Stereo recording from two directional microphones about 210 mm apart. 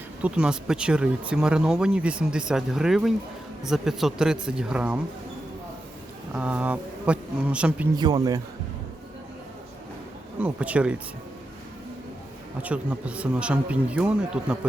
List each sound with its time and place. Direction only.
0.2 s speech: 5° right (ahead or behind)
6.3 s speech: 5° right (ahead or behind)
7.9 s speech: 20° right (ahead or behind)
10.4 s speech: 5° right (ahead or behind)
12.6 s speech: 5° right (ahead or behind)